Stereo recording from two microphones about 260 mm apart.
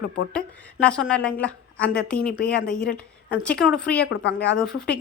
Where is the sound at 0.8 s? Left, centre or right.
Centre.